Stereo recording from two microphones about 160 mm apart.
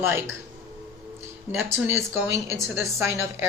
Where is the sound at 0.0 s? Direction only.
15° right (ahead or behind).